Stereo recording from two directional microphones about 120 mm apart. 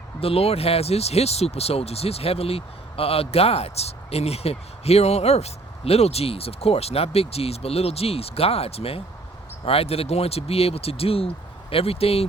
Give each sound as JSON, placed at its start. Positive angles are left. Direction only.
{"t": 0.2, "sound": "speech", "side_deg": 55}